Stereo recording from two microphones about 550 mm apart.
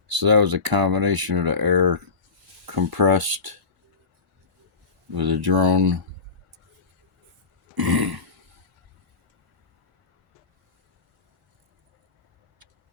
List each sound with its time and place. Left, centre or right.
0.2 s speech: right
5.1 s speech: right
7.8 s burping: right